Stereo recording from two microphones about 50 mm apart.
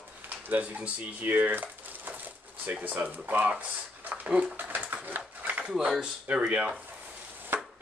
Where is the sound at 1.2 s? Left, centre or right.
Right.